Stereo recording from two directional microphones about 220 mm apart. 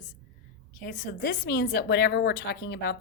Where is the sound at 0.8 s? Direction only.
40° left (ahead or behind).